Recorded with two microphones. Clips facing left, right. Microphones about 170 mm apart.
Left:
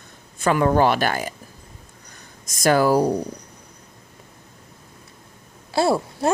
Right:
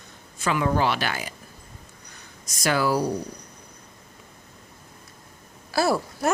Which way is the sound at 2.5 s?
50° left (ahead or behind).